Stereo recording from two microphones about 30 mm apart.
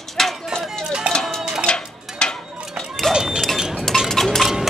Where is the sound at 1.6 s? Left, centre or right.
Left.